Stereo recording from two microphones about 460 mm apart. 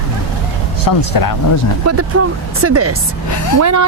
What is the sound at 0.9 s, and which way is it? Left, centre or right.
Speech, left.